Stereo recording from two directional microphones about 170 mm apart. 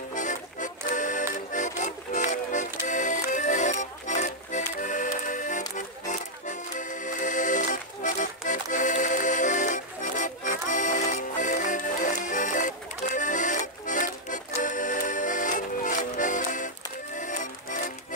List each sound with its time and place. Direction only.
0.1 s music: 45° left (ahead or behind)
5.8 s accordion: 45° left (ahead or behind)